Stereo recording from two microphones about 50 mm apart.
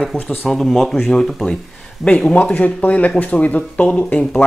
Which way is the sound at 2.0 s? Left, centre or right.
Left.